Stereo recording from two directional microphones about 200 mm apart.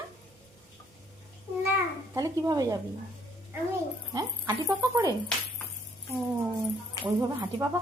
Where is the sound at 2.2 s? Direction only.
15° right (ahead or behind).